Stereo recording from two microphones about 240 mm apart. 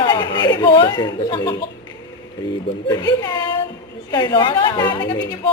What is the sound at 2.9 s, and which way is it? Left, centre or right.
A woman's voice, centre.